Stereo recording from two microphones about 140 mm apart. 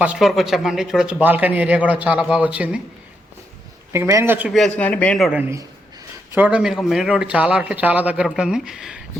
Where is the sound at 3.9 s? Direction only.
20° right (ahead or behind).